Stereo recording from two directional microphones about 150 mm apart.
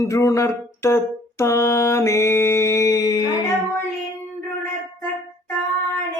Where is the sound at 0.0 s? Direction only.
20° left (ahead or behind).